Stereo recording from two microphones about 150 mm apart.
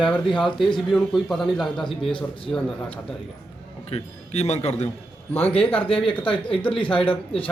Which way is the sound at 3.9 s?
50° left (ahead or behind).